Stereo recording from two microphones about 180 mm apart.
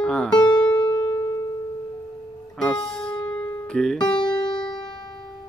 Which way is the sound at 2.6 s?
5° left (ahead or behind).